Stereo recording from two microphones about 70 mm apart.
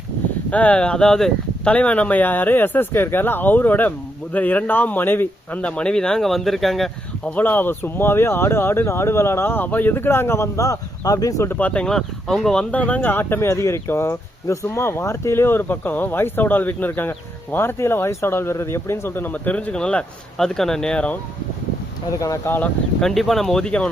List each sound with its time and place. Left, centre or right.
0.5 s speech: centre
1.7 s speech: centre
7.3 s speech: left
11.4 s speech: left; by 12.6 s centre
12.7 s speech: left
22.5 s speech: left
23.0 s speech: centre